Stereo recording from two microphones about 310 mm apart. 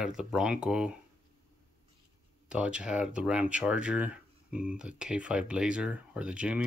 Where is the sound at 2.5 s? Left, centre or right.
Centre.